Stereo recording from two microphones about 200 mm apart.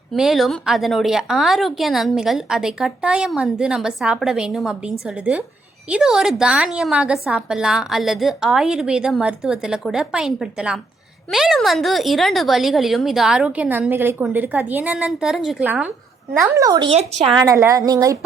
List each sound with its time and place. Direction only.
0.1 s a woman's voice: centre (ahead or behind)
16.6 s speech: 20° right (ahead or behind)
17.4 s speech: 15° right (ahead or behind)